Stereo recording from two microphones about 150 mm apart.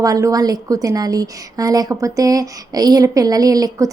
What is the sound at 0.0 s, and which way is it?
A woman's voice, 25° right (ahead or behind).